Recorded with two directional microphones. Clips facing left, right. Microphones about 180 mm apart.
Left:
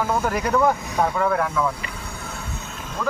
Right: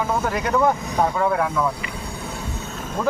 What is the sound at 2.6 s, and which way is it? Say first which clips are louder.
Music: right 4 dB; 45° right (ahead or behind).